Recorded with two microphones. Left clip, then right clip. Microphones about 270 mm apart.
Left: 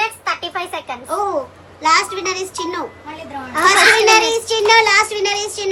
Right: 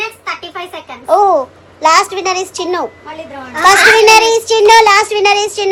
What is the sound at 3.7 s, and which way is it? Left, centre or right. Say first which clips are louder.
Child singing: right 5 dB; centre.